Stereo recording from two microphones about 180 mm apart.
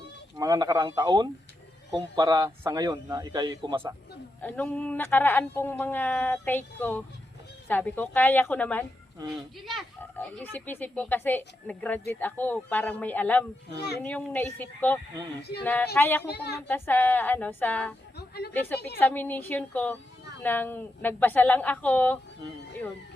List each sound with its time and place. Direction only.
0.3 s a man's voice: 20° right (ahead or behind)
4.4 s speech: 10° left (ahead or behind)
10.2 s speech: 10° left (ahead or behind)
13.7 s a woman's voice: 65° left (ahead or behind)
14.0 s speech: 10° left (ahead or behind)
16.2 s a woman's voice: 65° left (ahead or behind)
16.6 s speech: 10° left (ahead or behind)
18.2 s a sound: 65° left (ahead or behind)
18.9 s speech: 10° left (ahead or behind)